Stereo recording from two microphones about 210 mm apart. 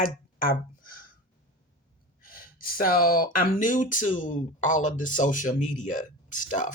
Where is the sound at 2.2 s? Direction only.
45° left (ahead or behind).